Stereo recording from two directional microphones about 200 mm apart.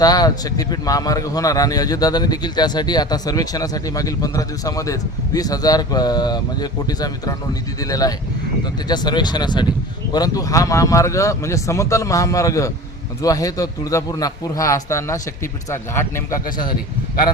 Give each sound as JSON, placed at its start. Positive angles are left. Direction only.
{"t": 0.0, "sound": "speech", "side_deg": 20}